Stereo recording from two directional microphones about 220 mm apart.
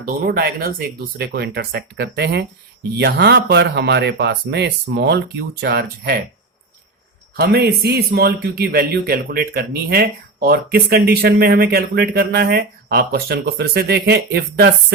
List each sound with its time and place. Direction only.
0.0 s a man's voice: 40° right (ahead or behind)
7.3 s a man's voice: 45° right (ahead or behind)